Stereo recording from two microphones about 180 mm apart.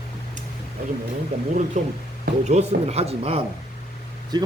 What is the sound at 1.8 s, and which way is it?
Speech, 40° right (ahead or behind).